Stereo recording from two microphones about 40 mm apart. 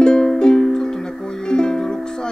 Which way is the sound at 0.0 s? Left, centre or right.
Centre.